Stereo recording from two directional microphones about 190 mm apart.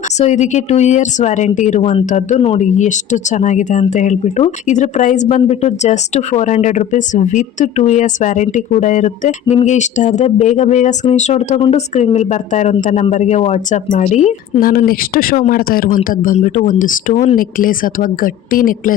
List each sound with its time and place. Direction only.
0.2 s speech: 35° left (ahead or behind)